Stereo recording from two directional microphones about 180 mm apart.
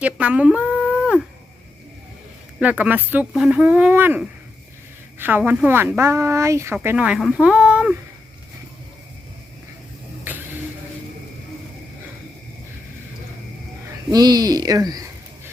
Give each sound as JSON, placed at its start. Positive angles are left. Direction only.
{"t": 0.0, "sound": "speech", "side_deg": -5}
{"t": 2.6, "sound": "speech", "side_deg": -10}
{"t": 10.2, "sound": "a sound", "side_deg": -10}
{"t": 14.1, "sound": "speech", "side_deg": -20}